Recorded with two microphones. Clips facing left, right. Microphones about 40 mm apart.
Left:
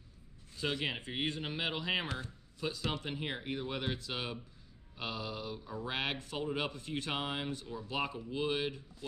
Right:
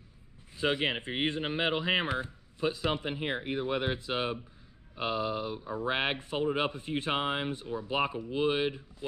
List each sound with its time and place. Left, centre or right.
0.6 s speech: right